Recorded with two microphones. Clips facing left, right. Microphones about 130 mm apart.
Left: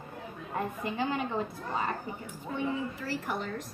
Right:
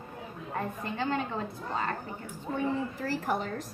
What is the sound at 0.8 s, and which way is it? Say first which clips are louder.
Speech: right 1 dB; 10° left (ahead or behind).